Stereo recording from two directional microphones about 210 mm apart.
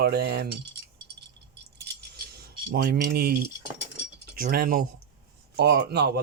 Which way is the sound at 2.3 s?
50° right (ahead or behind).